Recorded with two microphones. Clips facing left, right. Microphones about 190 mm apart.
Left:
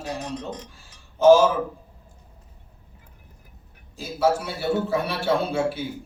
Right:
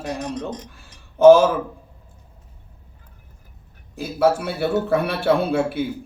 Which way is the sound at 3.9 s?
60° right (ahead or behind).